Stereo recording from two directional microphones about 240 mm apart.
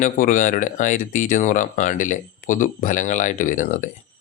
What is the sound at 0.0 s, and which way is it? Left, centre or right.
Speech, left.